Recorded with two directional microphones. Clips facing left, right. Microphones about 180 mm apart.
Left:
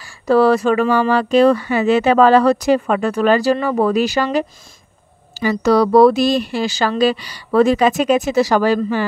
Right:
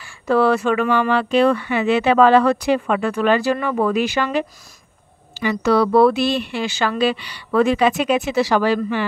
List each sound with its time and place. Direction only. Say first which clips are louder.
0.0 s speech: left 4 dB; 35° left (ahead or behind)